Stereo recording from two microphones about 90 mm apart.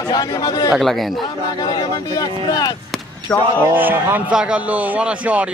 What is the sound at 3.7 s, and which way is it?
Speech, 20° right (ahead or behind).